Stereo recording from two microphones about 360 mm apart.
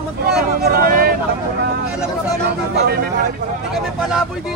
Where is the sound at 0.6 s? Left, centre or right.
Right.